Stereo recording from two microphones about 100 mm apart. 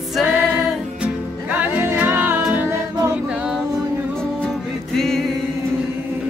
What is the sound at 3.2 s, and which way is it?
A capella, 10° right (ahead or behind).